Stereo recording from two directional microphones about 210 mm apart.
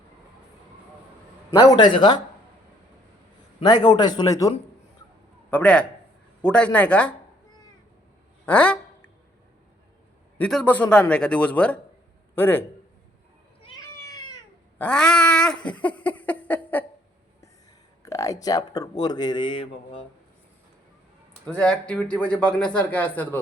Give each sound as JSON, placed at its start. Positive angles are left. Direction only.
{"t": 1.5, "sound": "speech", "side_deg": 20}
{"t": 3.6, "sound": "a man's voice", "side_deg": 20}
{"t": 8.4, "sound": "a sound", "side_deg": 5}
{"t": 10.3, "sound": "a man's voice", "side_deg": 5}
{"t": 13.9, "sound": "cat", "side_deg": 15}
{"t": 14.8, "sound": "cat", "side_deg": 5}
{"t": 18.0, "sound": "speech", "side_deg": 15}
{"t": 21.4, "sound": "speech", "side_deg": 5}